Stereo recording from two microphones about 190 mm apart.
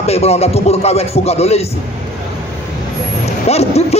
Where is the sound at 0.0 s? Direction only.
35° left (ahead or behind).